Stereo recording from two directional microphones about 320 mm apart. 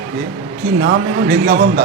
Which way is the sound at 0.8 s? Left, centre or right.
Right.